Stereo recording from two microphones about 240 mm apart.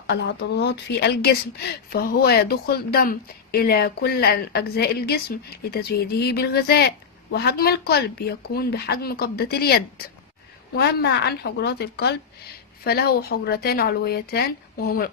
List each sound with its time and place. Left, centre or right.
0.0 s a woman's voice: left